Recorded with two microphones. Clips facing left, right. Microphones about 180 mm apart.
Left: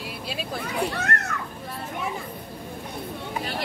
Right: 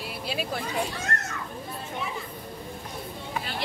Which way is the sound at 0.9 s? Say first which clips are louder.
Left 4 dB; 65° left (ahead or behind).